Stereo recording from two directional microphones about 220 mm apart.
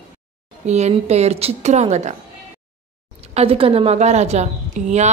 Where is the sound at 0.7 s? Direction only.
30° right (ahead or behind).